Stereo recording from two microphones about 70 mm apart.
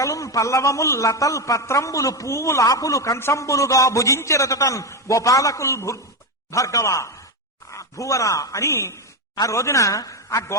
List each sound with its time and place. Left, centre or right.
0.0 s a man's voice: left
3.2 s a man's voice: left
8.6 s a man's voice: left